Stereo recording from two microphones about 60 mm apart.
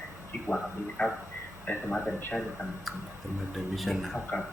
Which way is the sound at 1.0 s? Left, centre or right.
Centre.